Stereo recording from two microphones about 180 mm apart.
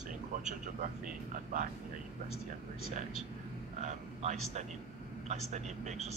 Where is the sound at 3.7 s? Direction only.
40° right (ahead or behind).